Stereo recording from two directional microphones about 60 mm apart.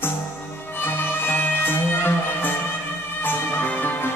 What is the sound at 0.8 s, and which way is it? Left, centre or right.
Music, left.